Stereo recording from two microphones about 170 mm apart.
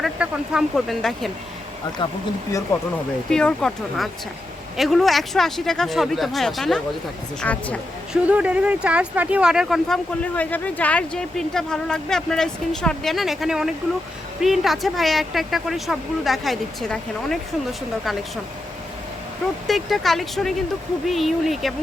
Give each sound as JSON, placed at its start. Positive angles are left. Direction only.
{"t": 0.0, "sound": "speech", "side_deg": -5}
{"t": 2.0, "sound": "speech", "side_deg": 30}
{"t": 3.2, "sound": "speech", "side_deg": 5}
{"t": 8.1, "sound": "speech", "side_deg": -5}
{"t": 19.6, "sound": "speech", "side_deg": 0}